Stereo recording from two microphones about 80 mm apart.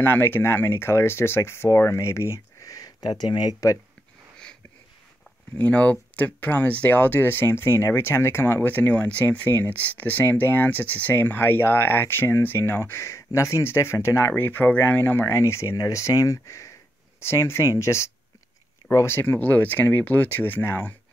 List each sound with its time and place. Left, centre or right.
0.0 s speech: left
5.6 s speech: centre